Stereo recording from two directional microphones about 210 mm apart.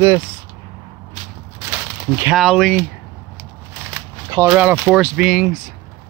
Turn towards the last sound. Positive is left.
turn(degrees=-5)  # may be behind; listen again after turning